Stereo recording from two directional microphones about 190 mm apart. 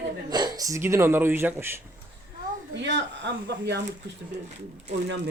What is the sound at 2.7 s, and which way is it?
Speech, 65° right (ahead or behind).